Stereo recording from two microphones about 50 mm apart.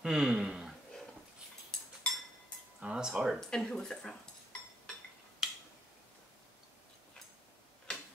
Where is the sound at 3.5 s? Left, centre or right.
Centre.